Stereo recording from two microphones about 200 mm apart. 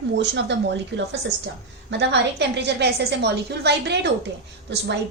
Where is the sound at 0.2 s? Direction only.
60° right (ahead or behind).